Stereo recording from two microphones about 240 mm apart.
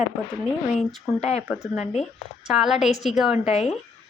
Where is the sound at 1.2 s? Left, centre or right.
Left.